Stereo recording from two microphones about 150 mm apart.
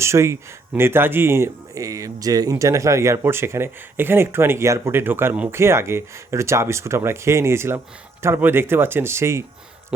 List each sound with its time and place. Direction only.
0.0 s speech: 20° right (ahead or behind)